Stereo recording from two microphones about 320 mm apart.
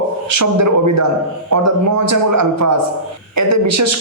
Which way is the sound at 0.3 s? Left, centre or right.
Right.